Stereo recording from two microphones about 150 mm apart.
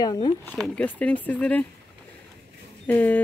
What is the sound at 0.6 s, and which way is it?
Speech, 10° left (ahead or behind).